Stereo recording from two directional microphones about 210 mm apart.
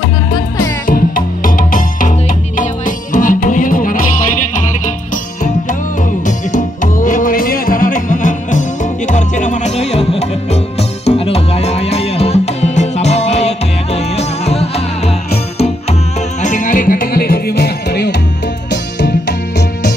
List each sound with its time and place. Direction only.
0.8 s music: 40° left (ahead or behind)
6.2 s music: 40° left (ahead or behind)
16.4 s music: 35° left (ahead or behind); by 19.3 s 55° left (ahead or behind)